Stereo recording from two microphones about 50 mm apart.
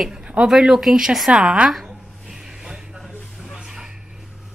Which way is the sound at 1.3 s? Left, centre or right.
Right.